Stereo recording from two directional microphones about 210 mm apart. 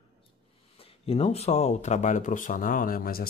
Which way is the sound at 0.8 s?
30° left (ahead or behind).